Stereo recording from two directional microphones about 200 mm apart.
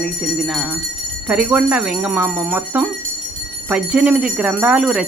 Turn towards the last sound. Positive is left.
turn(degrees=-5)  # may be behind; listen again after turning